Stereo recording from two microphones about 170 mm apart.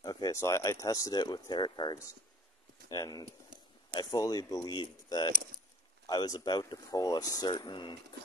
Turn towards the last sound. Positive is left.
turn(degrees=30)  # may be behind; listen again after turning